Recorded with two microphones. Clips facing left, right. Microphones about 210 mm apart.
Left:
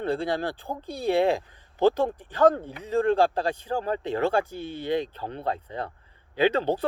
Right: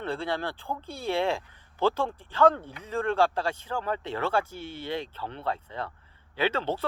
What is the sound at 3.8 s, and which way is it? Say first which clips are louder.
Speech: left 3 dB; 40° left (ahead or behind).